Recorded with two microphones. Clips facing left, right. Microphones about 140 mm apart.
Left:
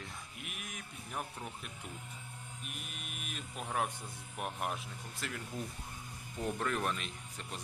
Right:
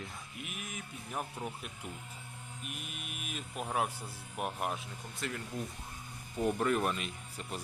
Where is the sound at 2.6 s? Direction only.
5° right (ahead or behind).